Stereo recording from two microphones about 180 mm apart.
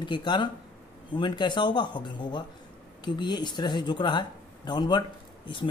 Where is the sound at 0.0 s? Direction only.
25° left (ahead or behind).